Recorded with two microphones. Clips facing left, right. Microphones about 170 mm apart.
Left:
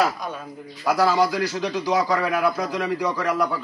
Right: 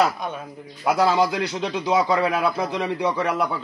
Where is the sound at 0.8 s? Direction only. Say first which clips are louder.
Even; 25° right (ahead or behind).